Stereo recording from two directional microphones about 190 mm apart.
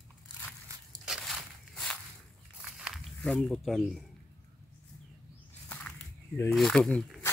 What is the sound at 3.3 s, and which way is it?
Speech, 5° left (ahead or behind).